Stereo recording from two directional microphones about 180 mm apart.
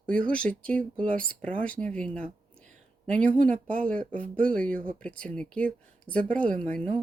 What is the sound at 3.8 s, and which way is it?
A woman's voice, 5° left (ahead or behind).